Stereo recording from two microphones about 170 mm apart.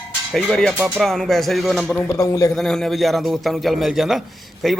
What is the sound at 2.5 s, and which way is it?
Speech, centre (ahead or behind).